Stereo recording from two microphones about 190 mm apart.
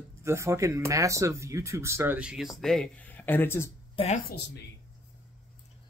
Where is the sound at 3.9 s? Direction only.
35° left (ahead or behind).